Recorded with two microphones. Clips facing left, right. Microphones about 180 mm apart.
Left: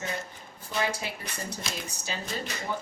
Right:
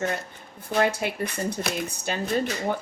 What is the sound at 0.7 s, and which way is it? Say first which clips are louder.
Speech: right 7 dB; 60° right (ahead or behind).